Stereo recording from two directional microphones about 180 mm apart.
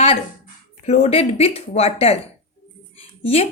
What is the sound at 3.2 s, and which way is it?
Speech, 35° left (ahead or behind).